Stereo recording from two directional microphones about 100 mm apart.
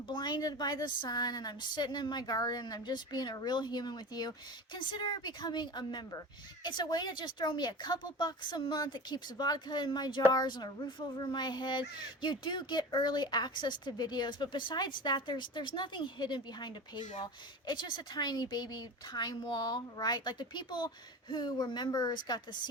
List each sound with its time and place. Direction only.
0.1 s speech: 45° left (ahead or behind)